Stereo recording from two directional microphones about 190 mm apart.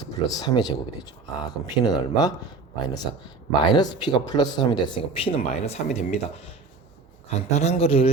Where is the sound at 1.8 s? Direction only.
20° left (ahead or behind).